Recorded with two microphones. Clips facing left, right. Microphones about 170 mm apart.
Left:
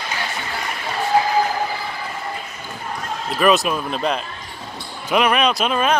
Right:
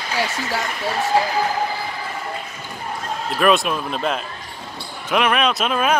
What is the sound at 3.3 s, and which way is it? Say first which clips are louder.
Speech: left 1 dB; centre (ahead or behind).